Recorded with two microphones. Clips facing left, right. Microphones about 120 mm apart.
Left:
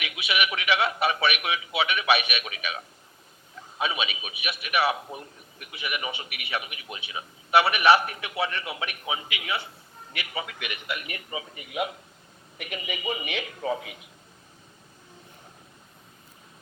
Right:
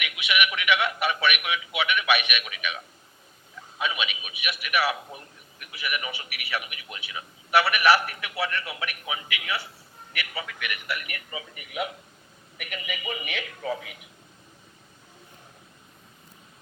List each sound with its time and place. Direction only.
0.0 s a man's voice: 30° left (ahead or behind)